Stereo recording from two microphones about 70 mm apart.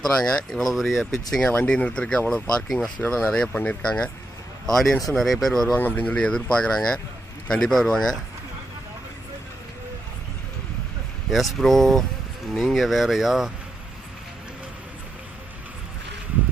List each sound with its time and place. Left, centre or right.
0.0 s speech: centre
3.5 s speech: left
3.8 s speech: centre
4.6 s speech: centre
5.7 s speech: left; by 8.2 s centre
11.3 s speech: centre